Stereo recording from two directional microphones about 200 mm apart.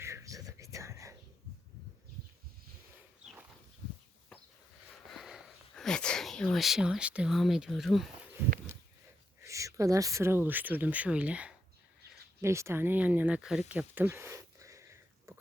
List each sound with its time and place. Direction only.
0.0 s whispering: 15° right (ahead or behind)
3.2 s dog: 35° right (ahead or behind)
5.1 s sniff: centre (ahead or behind)
9.4 s speech: 15° right (ahead or behind)
15.3 s whispering: 15° right (ahead or behind)